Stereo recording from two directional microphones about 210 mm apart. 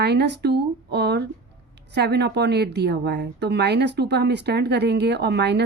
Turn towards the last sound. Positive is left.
turn(degrees=-55)  # may be behind; listen again after turning